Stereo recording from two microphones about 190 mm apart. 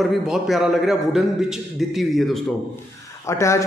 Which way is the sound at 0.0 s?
Centre (ahead or behind).